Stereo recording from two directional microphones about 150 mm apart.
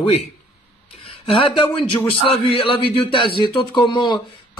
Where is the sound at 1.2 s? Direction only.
40° left (ahead or behind).